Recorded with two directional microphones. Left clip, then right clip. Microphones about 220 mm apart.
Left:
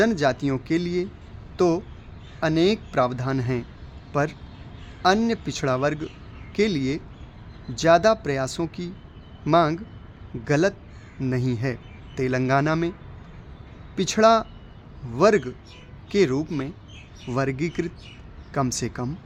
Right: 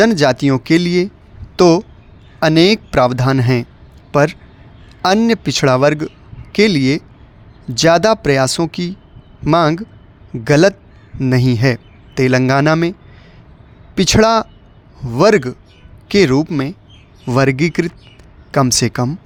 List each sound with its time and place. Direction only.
0.0 s speech: 45° right (ahead or behind)
13.9 s speech: 40° right (ahead or behind)